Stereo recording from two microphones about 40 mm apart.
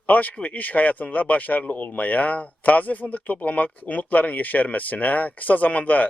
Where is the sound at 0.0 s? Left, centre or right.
Left.